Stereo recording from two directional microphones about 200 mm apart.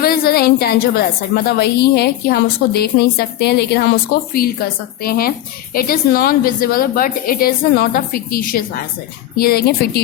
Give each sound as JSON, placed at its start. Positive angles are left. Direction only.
{"t": 0.0, "sound": "a woman's voice", "side_deg": 50}